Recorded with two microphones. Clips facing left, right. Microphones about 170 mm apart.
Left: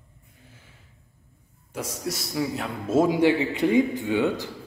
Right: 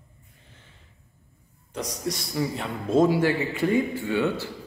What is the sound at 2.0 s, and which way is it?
A man's voice, 5° left (ahead or behind).